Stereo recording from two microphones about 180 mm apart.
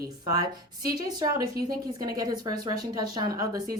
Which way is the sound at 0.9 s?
20° right (ahead or behind).